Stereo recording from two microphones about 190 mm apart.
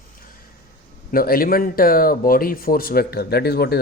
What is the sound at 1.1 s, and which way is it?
Speech, 50° left (ahead or behind).